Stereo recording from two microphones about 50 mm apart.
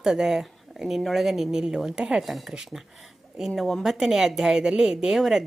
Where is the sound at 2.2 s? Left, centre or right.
Centre.